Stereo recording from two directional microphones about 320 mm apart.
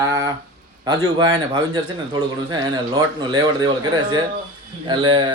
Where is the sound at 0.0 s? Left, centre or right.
Centre.